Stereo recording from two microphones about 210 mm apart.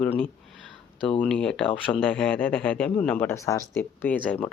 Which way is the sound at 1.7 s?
25° left (ahead or behind).